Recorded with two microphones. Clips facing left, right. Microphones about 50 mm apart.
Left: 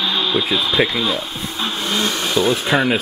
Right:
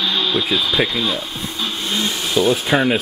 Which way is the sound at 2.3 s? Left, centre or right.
Centre.